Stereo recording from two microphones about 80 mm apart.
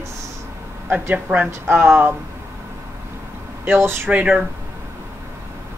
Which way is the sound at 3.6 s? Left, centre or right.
Right.